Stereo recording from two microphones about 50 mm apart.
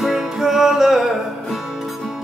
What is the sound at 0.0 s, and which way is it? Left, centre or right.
Music, centre.